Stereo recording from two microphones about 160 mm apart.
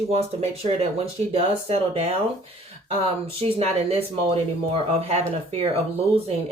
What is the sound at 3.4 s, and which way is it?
Speech, 40° right (ahead or behind).